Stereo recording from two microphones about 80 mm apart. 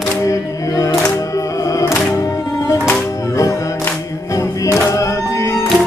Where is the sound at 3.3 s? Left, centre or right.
Left.